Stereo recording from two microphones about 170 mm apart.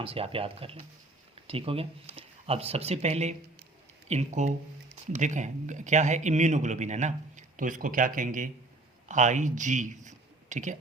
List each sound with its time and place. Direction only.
0.0 s a man's voice: 35° right (ahead or behind)